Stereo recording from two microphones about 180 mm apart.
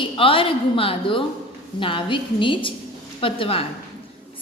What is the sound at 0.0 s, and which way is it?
A woman's voice, 30° left (ahead or behind).